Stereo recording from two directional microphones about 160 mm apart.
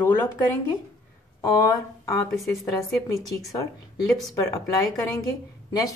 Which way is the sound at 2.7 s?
20° left (ahead or behind).